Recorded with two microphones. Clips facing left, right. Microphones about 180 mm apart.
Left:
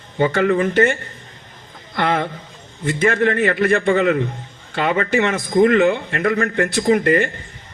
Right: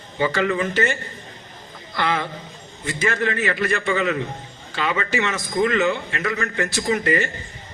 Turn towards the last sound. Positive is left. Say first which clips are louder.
# left 6 dB
turn(degrees=55)  # may be behind; listen again after turning